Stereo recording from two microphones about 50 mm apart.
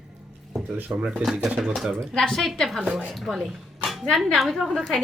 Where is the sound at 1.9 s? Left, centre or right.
Centre.